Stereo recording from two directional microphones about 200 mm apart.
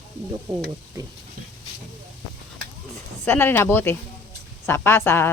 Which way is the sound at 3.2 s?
10° left (ahead or behind).